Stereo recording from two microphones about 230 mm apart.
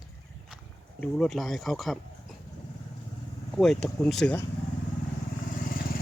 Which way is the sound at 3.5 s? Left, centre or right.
Centre.